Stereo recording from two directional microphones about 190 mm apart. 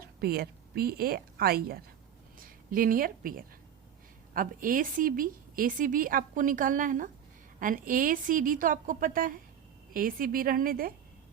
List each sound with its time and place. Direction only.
0.2 s a woman's voice: 55° right (ahead or behind)